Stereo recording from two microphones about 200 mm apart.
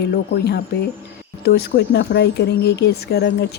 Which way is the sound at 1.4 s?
55° left (ahead or behind).